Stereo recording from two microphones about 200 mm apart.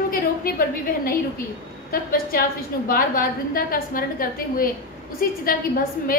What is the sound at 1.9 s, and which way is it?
A woman's voice, 45° left (ahead or behind).